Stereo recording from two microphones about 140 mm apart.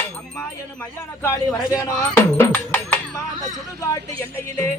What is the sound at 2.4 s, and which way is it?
Music, 10° left (ahead or behind).